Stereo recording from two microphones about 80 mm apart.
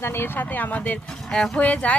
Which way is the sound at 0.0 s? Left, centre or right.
Left.